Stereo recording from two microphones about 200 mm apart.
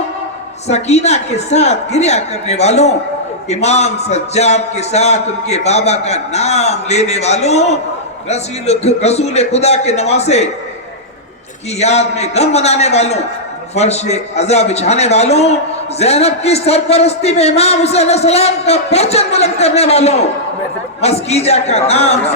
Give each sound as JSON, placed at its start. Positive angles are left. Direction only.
{"t": 0.7, "sound": "a man's voice", "side_deg": 35}
{"t": 11.8, "sound": "a man's voice", "side_deg": 35}